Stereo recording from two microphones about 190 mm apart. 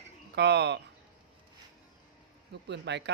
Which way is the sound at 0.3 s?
60° right (ahead or behind).